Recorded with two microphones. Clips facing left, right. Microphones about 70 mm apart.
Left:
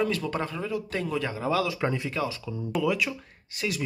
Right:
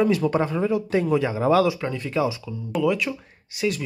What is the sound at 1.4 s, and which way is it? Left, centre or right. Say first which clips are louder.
Speech: right 8 dB; right.